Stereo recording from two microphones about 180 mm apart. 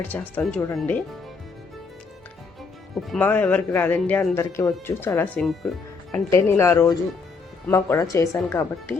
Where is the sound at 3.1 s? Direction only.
10° left (ahead or behind).